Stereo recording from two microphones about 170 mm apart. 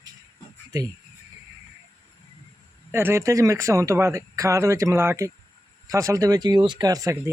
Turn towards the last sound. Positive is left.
turn(degrees=-20)  # may be behind; listen again after turning